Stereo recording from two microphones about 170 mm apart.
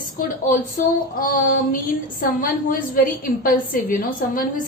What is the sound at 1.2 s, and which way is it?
A woman's voice, 55° left (ahead or behind).